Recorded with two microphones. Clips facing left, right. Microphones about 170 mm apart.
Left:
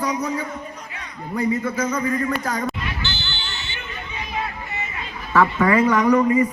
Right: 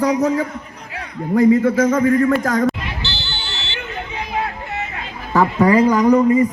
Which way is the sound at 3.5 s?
85° right.